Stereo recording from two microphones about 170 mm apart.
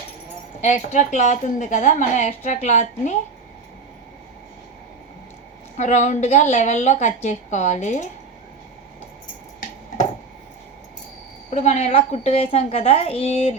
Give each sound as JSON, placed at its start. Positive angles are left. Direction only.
{"t": 0.6, "sound": "a woman's voice", "side_deg": 45}
{"t": 5.7, "sound": "a woman's voice", "side_deg": 45}
{"t": 11.5, "sound": "a child's voice", "side_deg": 40}